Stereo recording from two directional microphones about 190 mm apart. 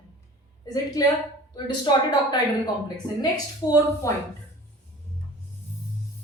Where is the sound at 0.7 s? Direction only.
20° left (ahead or behind).